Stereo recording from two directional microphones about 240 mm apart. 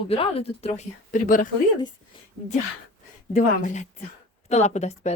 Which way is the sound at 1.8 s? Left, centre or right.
Centre.